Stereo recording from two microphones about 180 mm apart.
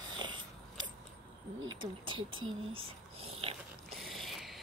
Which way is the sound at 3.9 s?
Centre (ahead or behind).